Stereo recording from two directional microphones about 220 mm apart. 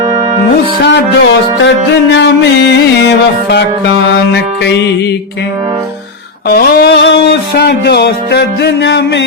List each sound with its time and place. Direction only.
0.9 s music: 55° left (ahead or behind)
6.5 s music: 45° left (ahead or behind)